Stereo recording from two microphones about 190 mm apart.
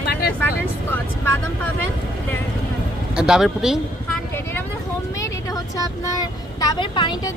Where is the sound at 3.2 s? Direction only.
5° right (ahead or behind).